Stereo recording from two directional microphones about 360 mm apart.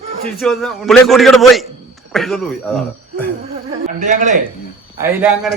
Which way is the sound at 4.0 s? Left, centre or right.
Right.